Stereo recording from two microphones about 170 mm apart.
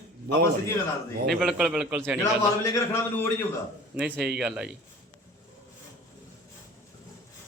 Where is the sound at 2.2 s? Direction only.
20° left (ahead or behind).